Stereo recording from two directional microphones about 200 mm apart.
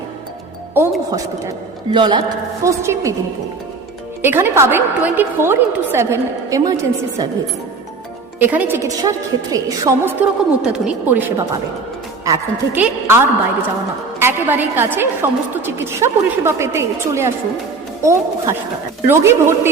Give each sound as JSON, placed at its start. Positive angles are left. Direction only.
{"t": 0.7, "sound": "a woman's voice", "side_deg": -15}
{"t": 4.2, "sound": "a woman's voice", "side_deg": -10}
{"t": 8.4, "sound": "a woman's voice", "side_deg": -10}